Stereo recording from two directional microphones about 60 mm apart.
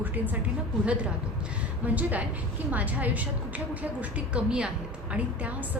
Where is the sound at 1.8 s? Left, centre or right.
Right.